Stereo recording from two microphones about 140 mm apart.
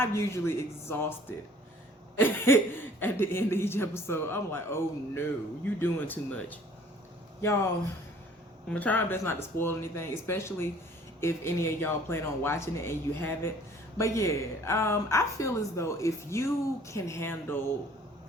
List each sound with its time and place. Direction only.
0.0 s speech: 20° left (ahead or behind)
2.1 s speech: 15° left (ahead or behind)
8.7 s speech: 10° left (ahead or behind)